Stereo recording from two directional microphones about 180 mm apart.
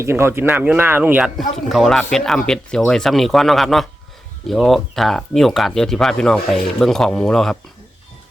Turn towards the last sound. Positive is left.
turn(degrees=5)  # may be behind; listen again after turning